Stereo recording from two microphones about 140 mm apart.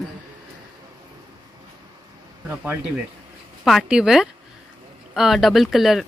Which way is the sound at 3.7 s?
Centre (ahead or behind).